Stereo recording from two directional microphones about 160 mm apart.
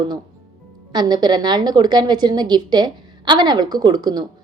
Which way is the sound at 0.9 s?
25° right (ahead or behind).